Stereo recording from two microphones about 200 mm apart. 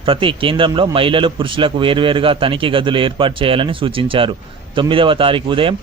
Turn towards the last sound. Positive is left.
turn(degrees=-25)  # may be behind; listen again after turning